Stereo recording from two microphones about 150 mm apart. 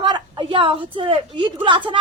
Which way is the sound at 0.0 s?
35° right (ahead or behind).